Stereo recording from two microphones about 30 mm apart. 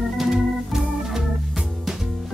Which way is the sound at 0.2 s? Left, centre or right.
Centre.